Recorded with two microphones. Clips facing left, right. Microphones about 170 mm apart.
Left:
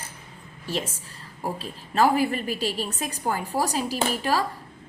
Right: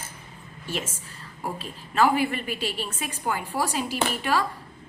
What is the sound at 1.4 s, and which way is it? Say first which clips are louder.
A woman's voice: left 2 dB; 35° left (ahead or behind).